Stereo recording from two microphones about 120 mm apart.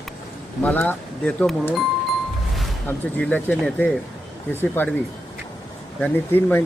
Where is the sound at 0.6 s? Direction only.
15° left (ahead or behind).